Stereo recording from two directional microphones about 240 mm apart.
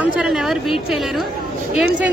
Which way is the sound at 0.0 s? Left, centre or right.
Centre.